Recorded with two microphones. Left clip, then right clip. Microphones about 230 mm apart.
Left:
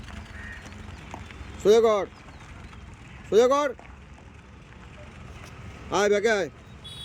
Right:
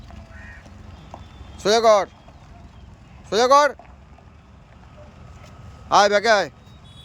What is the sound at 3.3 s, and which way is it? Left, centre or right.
Speech, centre.